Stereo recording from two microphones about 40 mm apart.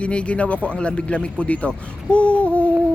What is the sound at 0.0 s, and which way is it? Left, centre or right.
Speech, left.